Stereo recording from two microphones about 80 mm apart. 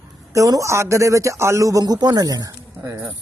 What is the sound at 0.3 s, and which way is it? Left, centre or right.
Speech, right.